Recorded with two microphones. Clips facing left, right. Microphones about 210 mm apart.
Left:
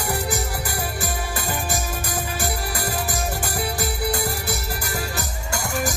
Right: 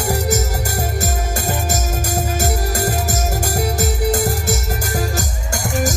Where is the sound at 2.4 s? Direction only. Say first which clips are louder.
Right 7 dB; 45° right (ahead or behind).